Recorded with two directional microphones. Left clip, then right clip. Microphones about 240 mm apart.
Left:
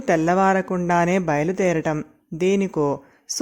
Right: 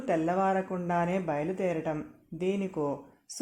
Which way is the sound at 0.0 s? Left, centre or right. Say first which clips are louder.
Left 9 dB; left.